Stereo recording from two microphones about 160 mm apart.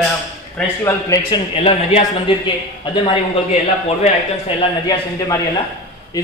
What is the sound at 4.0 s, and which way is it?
Speech, 40° left (ahead or behind).